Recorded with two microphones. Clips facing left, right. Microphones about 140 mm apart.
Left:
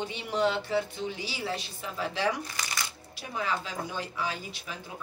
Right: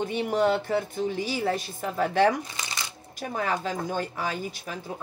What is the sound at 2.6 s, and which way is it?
Shuffling cards, 20° right (ahead or behind).